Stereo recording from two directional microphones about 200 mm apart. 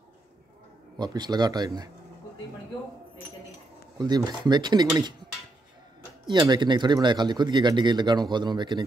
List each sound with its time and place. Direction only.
0.9 s speech: 20° right (ahead or behind)
4.0 s speech: 20° right (ahead or behind)
6.2 s speech: 20° right (ahead or behind)